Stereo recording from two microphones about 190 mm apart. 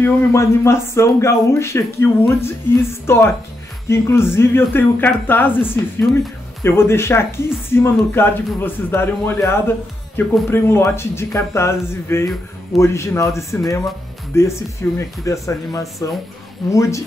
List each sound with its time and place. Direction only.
0.0 s speech: 15° left (ahead or behind)